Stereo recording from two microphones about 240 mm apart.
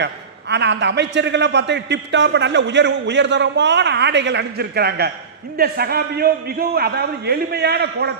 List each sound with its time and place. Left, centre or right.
0.0 s a man's voice: right